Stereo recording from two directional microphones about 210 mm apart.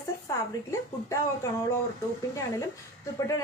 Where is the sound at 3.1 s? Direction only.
15° left (ahead or behind).